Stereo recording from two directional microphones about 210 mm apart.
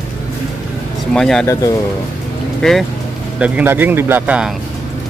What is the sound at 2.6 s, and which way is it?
A man's voice, centre (ahead or behind).